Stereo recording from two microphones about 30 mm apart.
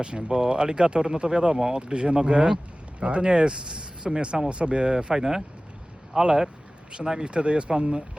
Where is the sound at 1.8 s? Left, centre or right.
Right.